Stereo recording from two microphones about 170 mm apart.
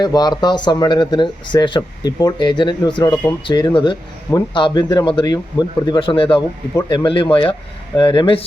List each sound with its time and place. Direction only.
0.0 s a man's voice: 25° left (ahead or behind)